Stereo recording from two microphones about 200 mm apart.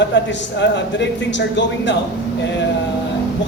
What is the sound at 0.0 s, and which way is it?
Speech, 60° left (ahead or behind).